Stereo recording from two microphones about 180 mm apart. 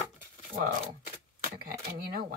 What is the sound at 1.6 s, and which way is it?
Speech, 55° right (ahead or behind).